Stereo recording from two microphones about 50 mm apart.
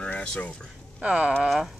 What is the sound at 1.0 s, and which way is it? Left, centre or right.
Speech, right.